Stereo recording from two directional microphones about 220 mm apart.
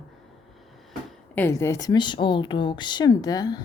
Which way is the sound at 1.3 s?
10° left (ahead or behind).